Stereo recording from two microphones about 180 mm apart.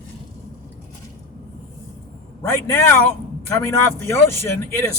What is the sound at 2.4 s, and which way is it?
Speech, 15° left (ahead or behind).